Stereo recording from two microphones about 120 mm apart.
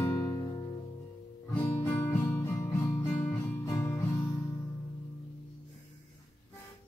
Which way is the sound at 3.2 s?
15° left (ahead or behind).